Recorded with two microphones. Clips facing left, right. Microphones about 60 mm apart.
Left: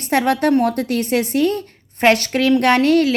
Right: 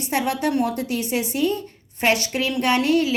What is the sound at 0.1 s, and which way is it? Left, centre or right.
A woman's voice, left.